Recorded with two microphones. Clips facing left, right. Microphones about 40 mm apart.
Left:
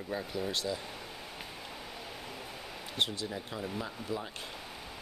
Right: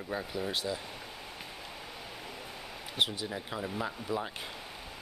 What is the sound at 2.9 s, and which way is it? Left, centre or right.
Speech, centre.